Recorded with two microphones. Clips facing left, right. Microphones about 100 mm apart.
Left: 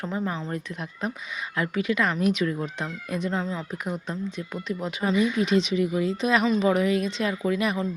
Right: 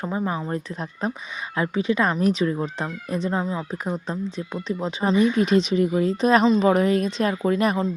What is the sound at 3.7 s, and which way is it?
Speech, 35° right (ahead or behind).